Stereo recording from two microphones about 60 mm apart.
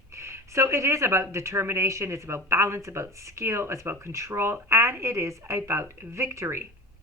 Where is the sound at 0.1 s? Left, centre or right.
Right.